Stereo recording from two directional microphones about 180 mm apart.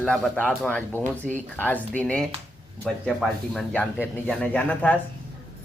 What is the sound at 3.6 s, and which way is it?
Speech, 5° left (ahead or behind).